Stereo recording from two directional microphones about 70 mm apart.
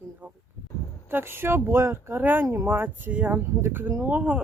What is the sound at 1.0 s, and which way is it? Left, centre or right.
Speech, right.